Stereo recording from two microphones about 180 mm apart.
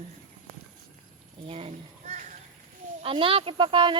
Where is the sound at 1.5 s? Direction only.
35° right (ahead or behind).